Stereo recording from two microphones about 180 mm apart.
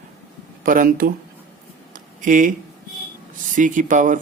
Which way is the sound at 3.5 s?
45° right (ahead or behind).